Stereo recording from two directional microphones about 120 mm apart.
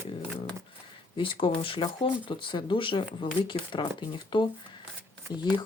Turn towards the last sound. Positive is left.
turn(degrees=35)  # may be behind; listen again after turning